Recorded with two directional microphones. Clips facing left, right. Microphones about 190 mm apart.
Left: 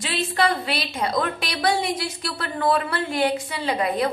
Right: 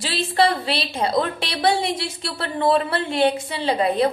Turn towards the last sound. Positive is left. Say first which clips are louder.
# right 4 dB
turn(degrees=-30)  # may be behind; listen again after turning